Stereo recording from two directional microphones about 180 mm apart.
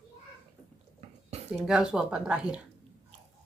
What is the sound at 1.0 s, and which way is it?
Dishes, 35° right (ahead or behind).